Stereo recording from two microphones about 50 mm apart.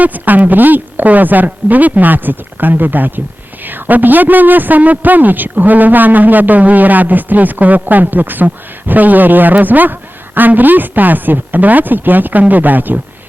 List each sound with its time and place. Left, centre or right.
0.0 s a man's voice: right